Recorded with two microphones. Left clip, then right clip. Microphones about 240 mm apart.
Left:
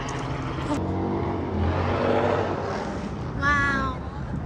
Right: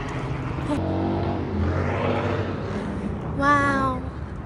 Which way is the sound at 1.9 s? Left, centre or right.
Left.